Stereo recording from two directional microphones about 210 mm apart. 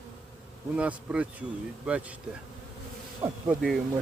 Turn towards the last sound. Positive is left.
turn(degrees=-5)  # may be behind; listen again after turning